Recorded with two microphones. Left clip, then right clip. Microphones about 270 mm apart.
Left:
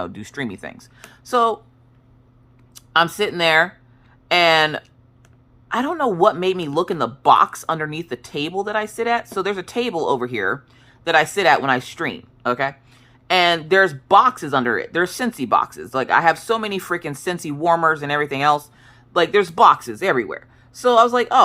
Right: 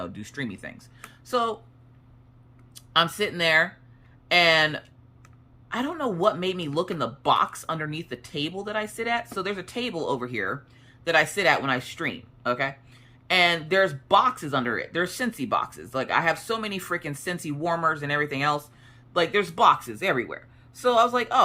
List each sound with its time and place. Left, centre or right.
0.0 s speech: centre
2.7 s speech: centre